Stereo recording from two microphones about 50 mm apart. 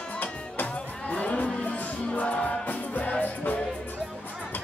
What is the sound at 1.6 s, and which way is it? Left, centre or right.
Music, left.